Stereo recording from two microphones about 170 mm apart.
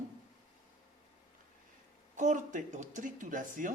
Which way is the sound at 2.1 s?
50° right (ahead or behind).